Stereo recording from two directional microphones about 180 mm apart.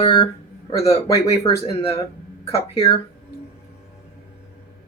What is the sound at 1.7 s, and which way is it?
Speech, 35° left (ahead or behind).